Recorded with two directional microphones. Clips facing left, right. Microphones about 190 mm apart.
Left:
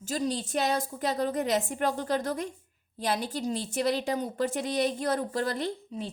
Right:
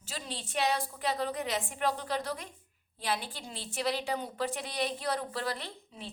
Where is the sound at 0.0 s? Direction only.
45° left (ahead or behind).